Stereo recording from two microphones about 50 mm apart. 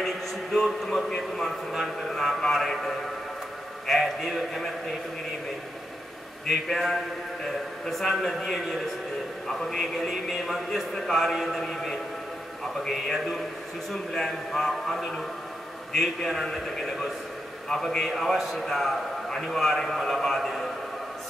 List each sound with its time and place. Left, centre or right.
0.0 s a sound: centre
1.0 s a man's voice: centre
6.5 s a man's voice: centre